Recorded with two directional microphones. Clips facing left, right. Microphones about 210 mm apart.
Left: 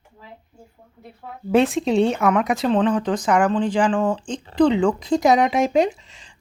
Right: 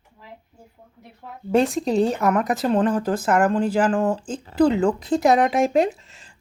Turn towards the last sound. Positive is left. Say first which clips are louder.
# left 1 dB
turn(degrees=0)  # may be behind; listen again after turning